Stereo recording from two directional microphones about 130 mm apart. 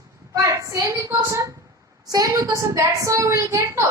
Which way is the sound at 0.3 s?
25° right (ahead or behind).